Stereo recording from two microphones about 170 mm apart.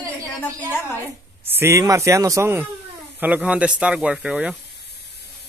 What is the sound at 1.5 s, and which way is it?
Speech, 15° right (ahead or behind).